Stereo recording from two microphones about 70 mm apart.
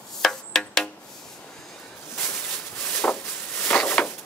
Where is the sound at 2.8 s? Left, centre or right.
Centre.